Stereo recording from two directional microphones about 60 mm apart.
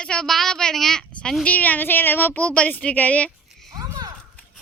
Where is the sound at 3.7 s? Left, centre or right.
Right.